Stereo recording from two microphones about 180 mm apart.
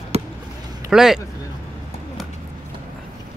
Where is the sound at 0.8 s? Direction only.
5° right (ahead or behind).